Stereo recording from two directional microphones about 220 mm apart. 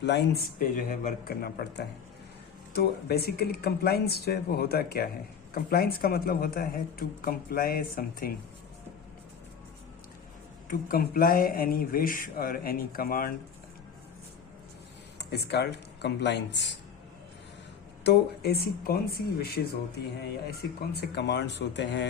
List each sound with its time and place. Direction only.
0.0 s speech: 50° left (ahead or behind)
10.7 s speech: 40° left (ahead or behind)
15.2 s speech: 50° left (ahead or behind)
18.0 s speech: 50° left (ahead or behind)